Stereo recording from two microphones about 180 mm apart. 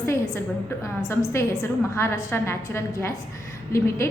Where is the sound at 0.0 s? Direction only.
15° left (ahead or behind).